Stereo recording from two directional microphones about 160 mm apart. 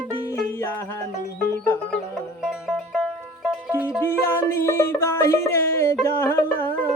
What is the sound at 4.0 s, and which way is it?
Music, 15° left (ahead or behind).